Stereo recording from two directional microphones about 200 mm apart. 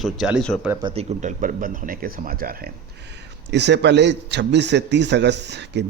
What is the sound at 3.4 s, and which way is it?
A man's voice, 60° right (ahead or behind).